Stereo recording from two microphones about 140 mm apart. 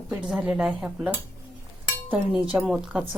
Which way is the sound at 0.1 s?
5° right (ahead or behind).